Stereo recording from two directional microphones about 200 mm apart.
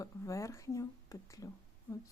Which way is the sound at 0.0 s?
15° left (ahead or behind).